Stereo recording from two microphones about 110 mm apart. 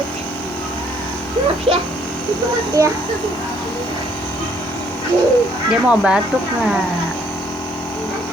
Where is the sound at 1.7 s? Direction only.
55° right (ahead or behind).